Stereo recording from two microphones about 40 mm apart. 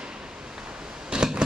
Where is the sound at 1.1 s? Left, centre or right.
Right.